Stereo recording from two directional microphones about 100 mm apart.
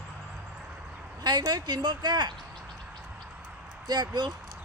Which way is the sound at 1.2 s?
45° right (ahead or behind).